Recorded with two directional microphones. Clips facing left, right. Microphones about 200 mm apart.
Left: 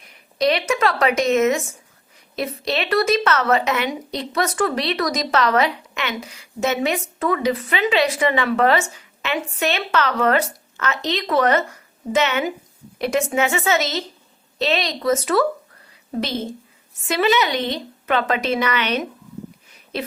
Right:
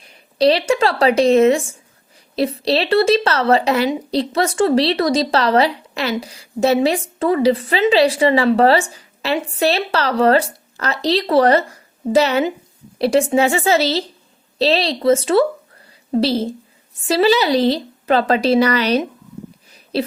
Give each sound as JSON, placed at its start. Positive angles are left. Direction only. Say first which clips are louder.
{"t": 0.0, "sound": "a woman's voice", "louder": "right 5 dB", "side_deg": -30}